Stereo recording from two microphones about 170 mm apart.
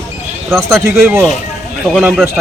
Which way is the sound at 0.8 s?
15° right (ahead or behind).